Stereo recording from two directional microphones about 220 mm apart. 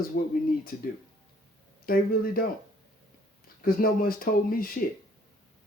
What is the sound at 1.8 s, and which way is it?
Speech, 40° left (ahead or behind).